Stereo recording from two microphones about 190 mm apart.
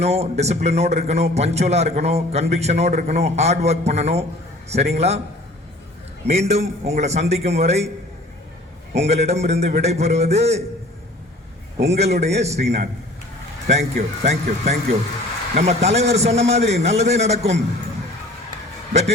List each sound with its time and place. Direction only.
0.0 s a man's voice: 35° right (ahead or behind)
6.2 s a man's voice: 35° right (ahead or behind)
9.0 s a man's voice: 35° right (ahead or behind)
11.8 s a man's voice: 35° right (ahead or behind)